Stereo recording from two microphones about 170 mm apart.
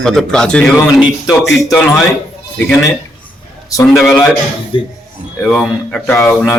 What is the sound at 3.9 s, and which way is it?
Speech, centre (ahead or behind).